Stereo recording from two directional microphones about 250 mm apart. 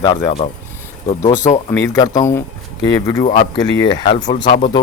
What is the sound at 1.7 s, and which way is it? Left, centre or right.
Speech, centre.